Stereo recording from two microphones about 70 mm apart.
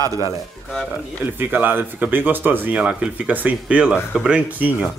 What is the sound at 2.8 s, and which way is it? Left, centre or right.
Speech, centre.